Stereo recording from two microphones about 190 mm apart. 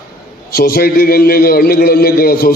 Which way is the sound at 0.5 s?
50° left (ahead or behind).